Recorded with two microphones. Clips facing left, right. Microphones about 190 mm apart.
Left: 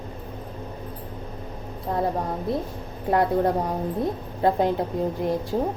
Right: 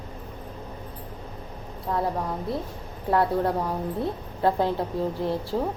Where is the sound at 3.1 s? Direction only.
20° left (ahead or behind).